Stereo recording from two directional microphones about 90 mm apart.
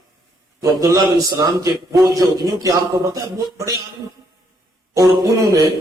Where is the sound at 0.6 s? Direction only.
35° right (ahead or behind).